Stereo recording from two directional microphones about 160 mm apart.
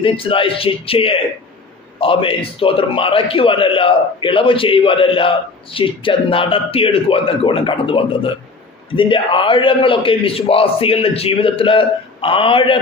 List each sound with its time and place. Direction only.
0.0 s a man's voice: 35° left (ahead or behind)